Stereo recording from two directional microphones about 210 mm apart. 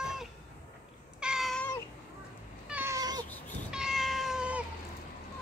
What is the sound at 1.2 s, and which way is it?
Cat, centre (ahead or behind).